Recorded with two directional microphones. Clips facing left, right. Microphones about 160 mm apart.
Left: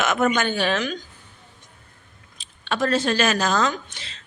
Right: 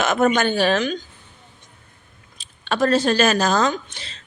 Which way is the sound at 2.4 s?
40° right (ahead or behind).